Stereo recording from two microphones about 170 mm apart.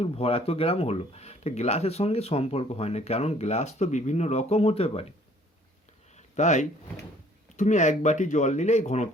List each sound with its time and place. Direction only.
0.0 s speech: 35° left (ahead or behind)
6.1 s a sound: 45° left (ahead or behind)
7.5 s speech: 45° left (ahead or behind)